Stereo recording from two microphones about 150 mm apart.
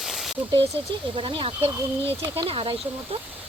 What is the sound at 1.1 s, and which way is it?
Speech, 35° right (ahead or behind).